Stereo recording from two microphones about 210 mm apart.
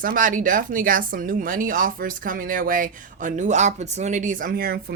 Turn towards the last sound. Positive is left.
turn(degrees=-45)  # may be behind; listen again after turning